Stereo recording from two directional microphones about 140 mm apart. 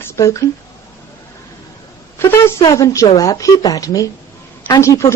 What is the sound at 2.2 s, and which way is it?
A woman's voice, 15° left (ahead or behind).